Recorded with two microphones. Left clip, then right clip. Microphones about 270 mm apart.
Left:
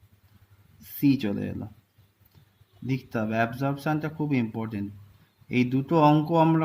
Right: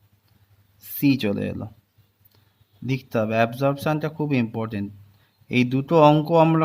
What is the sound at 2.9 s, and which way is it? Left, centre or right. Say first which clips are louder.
Speech: right 6 dB; right.